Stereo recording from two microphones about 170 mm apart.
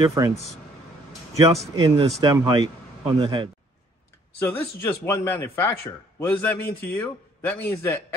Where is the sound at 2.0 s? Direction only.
20° right (ahead or behind).